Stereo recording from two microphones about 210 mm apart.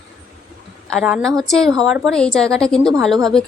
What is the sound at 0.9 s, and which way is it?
A woman's voice, centre (ahead or behind).